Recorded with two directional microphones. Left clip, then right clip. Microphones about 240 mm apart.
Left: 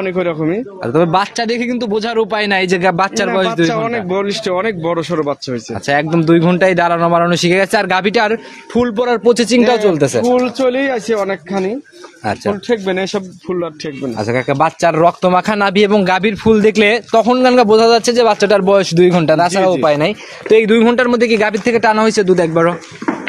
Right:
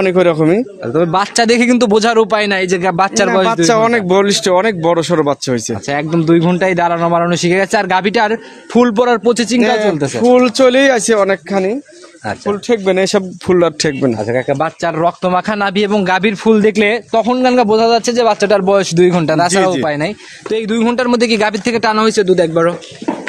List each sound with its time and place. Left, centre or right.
0.0 s speech: right
1.3 s speech: right
2.5 s speech: centre
3.0 s speech: centre
3.6 s speech: right
5.9 s speech: centre
8.7 s a man's voice: right
9.2 s speech: centre
9.9 s speech: centre
10.3 s speech: right
14.2 s speech: centre